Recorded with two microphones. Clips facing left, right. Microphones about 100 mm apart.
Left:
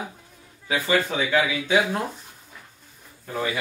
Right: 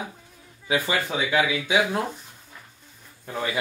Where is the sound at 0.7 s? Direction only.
15° right (ahead or behind).